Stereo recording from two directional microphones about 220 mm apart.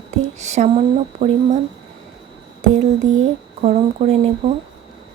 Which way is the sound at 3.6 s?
30° right (ahead or behind).